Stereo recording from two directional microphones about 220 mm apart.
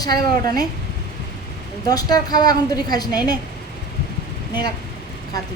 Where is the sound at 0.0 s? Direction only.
15° left (ahead or behind).